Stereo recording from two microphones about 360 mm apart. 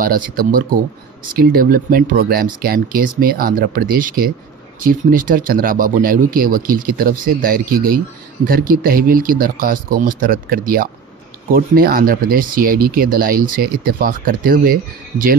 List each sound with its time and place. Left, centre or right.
0.0 s speech: right